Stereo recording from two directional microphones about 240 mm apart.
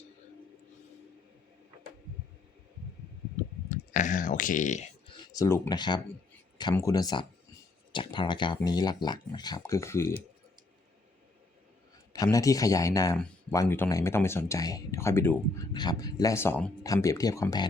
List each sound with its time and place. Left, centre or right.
3.9 s a sound: left
5.1 s speech: centre
12.1 s speech: centre